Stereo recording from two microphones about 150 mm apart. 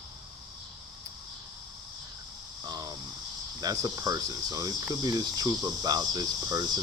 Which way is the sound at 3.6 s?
25° right (ahead or behind).